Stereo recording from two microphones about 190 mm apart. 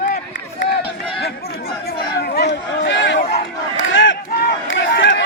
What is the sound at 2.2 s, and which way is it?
Crowd, 55° left (ahead or behind).